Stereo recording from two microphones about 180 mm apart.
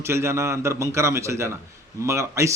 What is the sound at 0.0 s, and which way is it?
A man's voice, 15° right (ahead or behind).